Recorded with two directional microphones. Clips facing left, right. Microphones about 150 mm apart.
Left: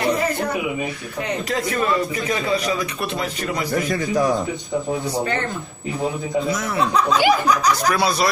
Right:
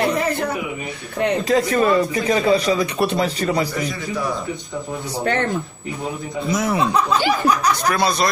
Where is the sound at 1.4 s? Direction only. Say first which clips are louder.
Right 5 dB; 35° right (ahead or behind).